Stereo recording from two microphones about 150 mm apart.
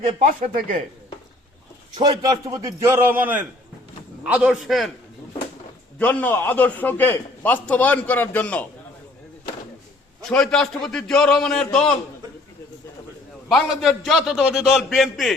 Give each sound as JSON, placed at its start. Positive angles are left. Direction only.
{"t": 0.0, "sound": "speech", "side_deg": -50}
{"t": 0.3, "sound": "speech", "side_deg": -65}
{"t": 2.0, "sound": "a man's voice", "side_deg": -25}
{"t": 6.0, "sound": "a man's voice", "side_deg": 10}
{"t": 10.2, "sound": "a man's voice", "side_deg": 5}
{"t": 13.5, "sound": "a man's voice", "side_deg": 0}